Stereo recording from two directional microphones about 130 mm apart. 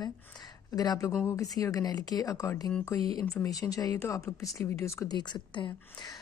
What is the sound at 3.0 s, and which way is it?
Speech, 45° right (ahead or behind).